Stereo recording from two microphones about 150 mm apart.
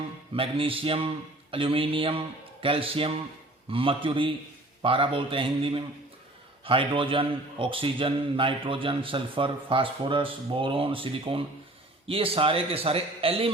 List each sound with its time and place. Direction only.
0.3 s a man's voice: 35° right (ahead or behind)